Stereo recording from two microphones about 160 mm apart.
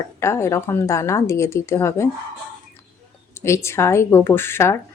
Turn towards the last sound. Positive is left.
turn(degrees=15)  # may be behind; listen again after turning